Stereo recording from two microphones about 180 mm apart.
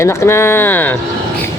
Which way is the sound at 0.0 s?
15° left (ahead or behind).